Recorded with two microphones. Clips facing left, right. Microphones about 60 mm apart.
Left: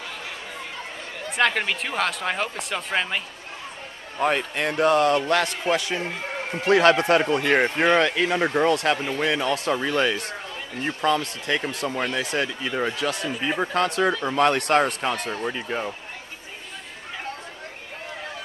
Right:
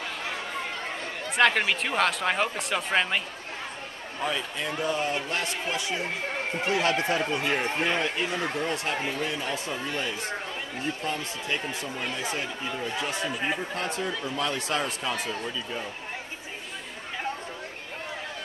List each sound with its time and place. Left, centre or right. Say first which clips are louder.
1.3 s speech: even; centre
4.2 s a man's voice: left 7 dB; left
10.8 s a man's voice: left 9 dB; left